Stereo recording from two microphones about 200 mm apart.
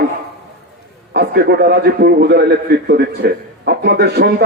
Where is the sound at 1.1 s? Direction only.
55° right (ahead or behind).